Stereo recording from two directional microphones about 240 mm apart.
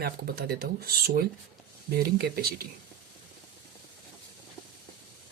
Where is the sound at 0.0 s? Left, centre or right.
Right.